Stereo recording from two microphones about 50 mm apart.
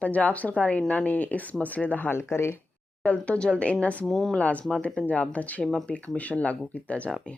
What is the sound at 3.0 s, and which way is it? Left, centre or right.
Speech, left.